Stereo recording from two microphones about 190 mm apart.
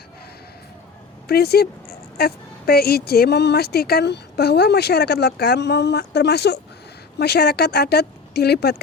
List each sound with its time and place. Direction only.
1.3 s speech: 55° left (ahead or behind)